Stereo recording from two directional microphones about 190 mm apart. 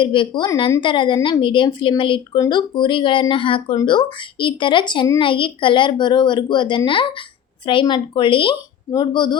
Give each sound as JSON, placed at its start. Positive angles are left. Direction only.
{"t": 0.0, "sound": "a woman's voice", "side_deg": 25}